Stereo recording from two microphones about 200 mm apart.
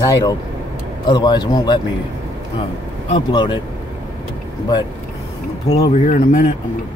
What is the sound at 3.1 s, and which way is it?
Speech, 25° left (ahead or behind).